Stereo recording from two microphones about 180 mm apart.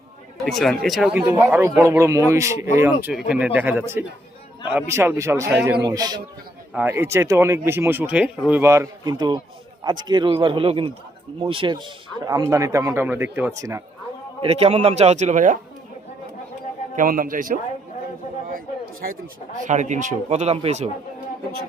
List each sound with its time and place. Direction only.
0.4 s speech: centre (ahead or behind); by 3.1 s 15° right (ahead or behind)
3.1 s a man's voice: 5° right (ahead or behind)
14.4 s speech: 35° right (ahead or behind)
16.9 s a man's voice: 50° right (ahead or behind)
19.6 s speech: 40° right (ahead or behind)